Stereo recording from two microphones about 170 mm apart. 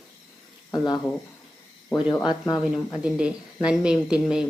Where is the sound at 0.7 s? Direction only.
25° left (ahead or behind).